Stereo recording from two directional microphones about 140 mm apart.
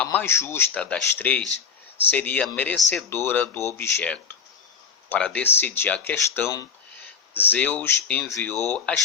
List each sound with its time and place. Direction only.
0.0 s speech: 15° left (ahead or behind)